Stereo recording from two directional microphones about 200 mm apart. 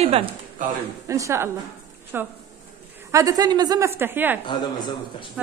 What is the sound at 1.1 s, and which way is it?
A woman's voice, 15° right (ahead or behind).